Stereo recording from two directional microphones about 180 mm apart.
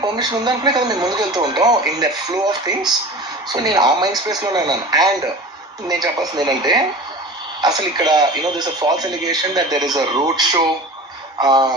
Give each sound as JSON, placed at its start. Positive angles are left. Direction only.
{"t": 0.0, "sound": "speech", "side_deg": -25}